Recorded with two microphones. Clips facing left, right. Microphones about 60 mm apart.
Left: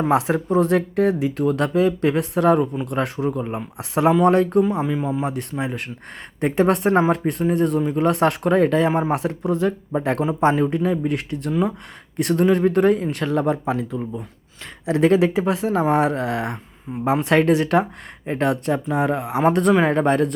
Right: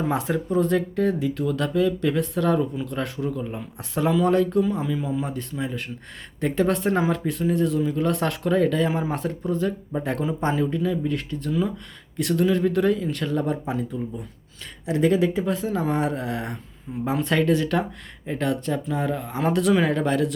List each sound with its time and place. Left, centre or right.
0.1 s speech: left
0.4 s speech: left
17.2 s speech: left
19.5 s speech: left